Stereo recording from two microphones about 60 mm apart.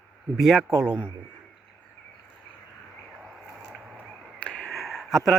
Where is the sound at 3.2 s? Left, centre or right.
Centre.